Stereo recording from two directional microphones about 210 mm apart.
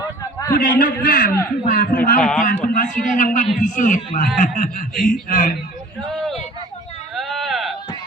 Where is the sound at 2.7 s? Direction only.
40° left (ahead or behind).